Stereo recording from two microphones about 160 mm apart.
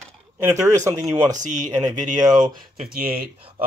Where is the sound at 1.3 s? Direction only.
50° right (ahead or behind).